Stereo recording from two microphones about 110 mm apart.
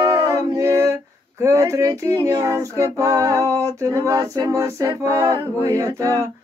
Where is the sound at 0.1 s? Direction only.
30° right (ahead or behind).